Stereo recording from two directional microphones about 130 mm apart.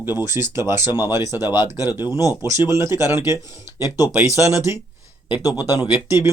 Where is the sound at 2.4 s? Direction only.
20° right (ahead or behind).